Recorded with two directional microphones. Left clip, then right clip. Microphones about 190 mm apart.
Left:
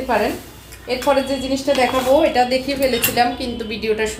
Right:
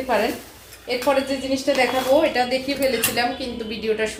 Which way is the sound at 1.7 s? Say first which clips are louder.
Left 3 dB; 20° left (ahead or behind).